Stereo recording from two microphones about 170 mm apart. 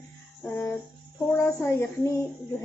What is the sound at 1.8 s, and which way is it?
Speech, 15° left (ahead or behind).